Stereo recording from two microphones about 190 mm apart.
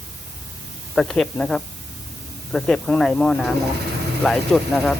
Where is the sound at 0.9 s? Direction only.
Centre (ahead or behind).